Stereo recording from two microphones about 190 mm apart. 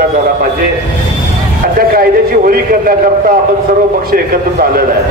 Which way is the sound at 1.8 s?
50° right (ahead or behind).